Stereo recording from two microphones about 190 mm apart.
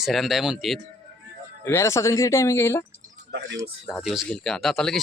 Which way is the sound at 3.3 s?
60° right (ahead or behind).